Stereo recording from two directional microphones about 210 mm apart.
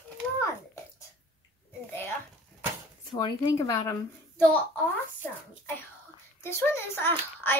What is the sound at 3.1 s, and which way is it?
A child's voice, 20° left (ahead or behind).